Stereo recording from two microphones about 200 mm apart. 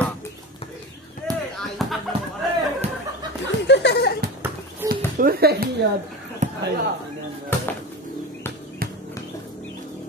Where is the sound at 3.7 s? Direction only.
60° left (ahead or behind).